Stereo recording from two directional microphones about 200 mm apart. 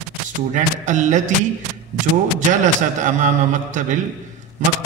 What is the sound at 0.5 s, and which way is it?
Speech, 40° right (ahead or behind).